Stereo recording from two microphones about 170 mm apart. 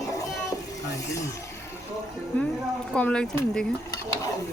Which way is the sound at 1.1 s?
20° left (ahead or behind).